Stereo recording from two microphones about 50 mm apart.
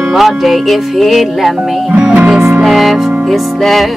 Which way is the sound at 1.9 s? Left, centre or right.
Right.